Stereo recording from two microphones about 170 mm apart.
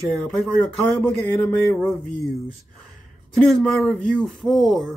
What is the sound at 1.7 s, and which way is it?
Speech, 15° left (ahead or behind).